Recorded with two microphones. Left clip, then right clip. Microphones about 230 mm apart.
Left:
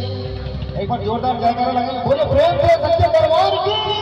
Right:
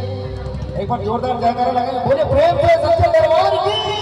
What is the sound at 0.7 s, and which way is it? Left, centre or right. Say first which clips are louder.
A man's voice: right 1 dB; right.